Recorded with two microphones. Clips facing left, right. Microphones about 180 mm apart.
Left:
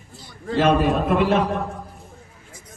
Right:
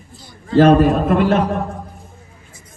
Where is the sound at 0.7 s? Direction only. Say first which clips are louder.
Right 6 dB; centre (ahead or behind).